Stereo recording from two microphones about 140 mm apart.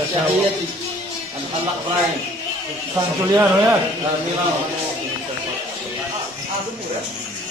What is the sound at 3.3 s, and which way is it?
Speech, 15° right (ahead or behind).